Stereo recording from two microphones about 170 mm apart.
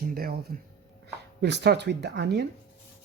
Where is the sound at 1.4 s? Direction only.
80° right.